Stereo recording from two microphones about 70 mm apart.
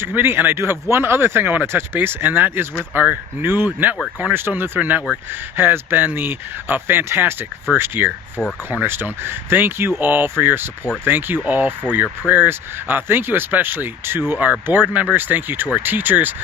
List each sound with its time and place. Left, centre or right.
0.0 s speech: right